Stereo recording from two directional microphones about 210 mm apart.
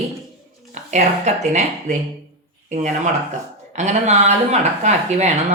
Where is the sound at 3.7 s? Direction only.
35° right (ahead or behind).